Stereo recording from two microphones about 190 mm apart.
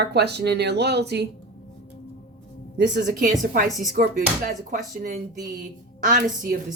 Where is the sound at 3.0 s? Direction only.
50° right (ahead or behind).